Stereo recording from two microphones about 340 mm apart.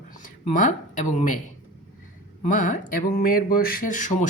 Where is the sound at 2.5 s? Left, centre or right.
Left.